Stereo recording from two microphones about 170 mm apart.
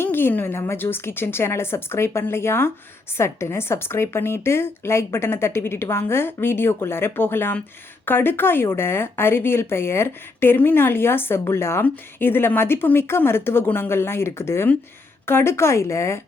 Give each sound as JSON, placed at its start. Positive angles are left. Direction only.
{"t": 0.0, "sound": "speech", "side_deg": 10}